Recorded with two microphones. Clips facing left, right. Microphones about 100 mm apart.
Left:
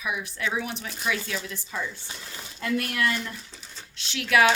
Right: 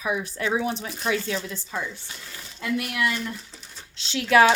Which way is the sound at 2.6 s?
15° right (ahead or behind).